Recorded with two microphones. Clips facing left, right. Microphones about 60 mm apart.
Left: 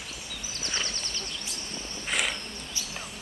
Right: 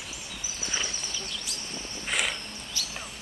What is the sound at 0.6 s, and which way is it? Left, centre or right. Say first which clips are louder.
Horse: even; centre.